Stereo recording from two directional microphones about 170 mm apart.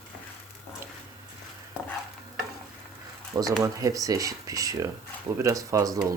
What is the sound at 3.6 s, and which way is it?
Speech, 20° right (ahead or behind).